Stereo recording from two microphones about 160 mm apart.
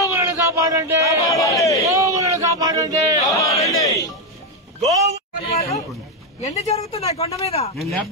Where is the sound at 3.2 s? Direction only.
20° left (ahead or behind).